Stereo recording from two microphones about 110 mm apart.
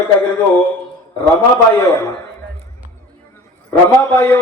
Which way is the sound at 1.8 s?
25° left (ahead or behind).